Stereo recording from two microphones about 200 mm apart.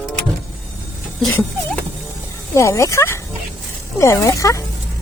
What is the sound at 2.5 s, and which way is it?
Speech, 15° left (ahead or behind).